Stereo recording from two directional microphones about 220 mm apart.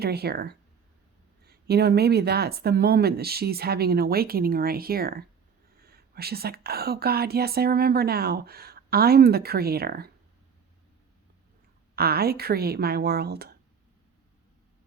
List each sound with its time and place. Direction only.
0.0 s speech: 45° right (ahead or behind)
11.9 s speech: 45° right (ahead or behind)